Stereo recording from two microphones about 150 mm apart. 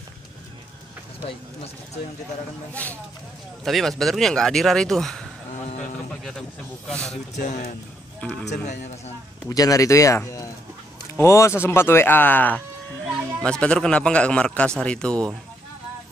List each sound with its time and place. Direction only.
2.7 s a man's voice: 10° left (ahead or behind)
6.9 s speech: 5° left (ahead or behind)
7.3 s speech: 75° left (ahead or behind)
8.5 s a man's voice: 50° left (ahead or behind)
9.5 s a man's voice: 25° left (ahead or behind); by 15.3 s 5° left (ahead or behind)